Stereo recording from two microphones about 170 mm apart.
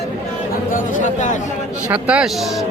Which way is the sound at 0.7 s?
50° left (ahead or behind).